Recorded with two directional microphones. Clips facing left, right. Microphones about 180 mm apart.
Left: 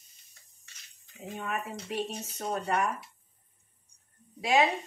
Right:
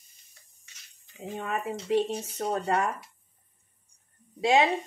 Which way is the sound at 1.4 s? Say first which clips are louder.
Right 4 dB; 30° right (ahead or behind).